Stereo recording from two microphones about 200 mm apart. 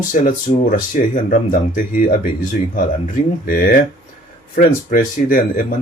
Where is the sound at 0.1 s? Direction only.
40° left (ahead or behind).